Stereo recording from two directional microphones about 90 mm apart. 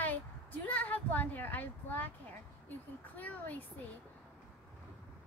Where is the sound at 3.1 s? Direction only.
20° left (ahead or behind).